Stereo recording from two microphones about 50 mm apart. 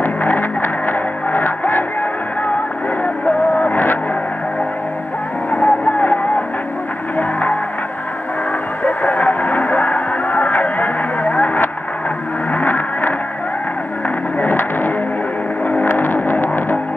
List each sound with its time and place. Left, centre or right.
0.0 s music: left
3.3 s vehicle: left
5.5 s music: left
8.8 s music: left
12.5 s vehicle: left
15.6 s vehicle: left